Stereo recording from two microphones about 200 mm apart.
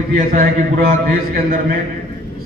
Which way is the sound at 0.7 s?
50° right (ahead or behind).